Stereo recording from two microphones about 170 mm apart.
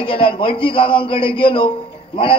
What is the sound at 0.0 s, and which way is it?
A man's voice, 30° left (ahead or behind).